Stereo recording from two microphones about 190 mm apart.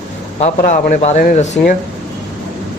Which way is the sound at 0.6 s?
40° left (ahead or behind).